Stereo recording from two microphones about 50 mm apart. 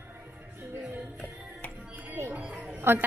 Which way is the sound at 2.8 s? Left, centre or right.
Right.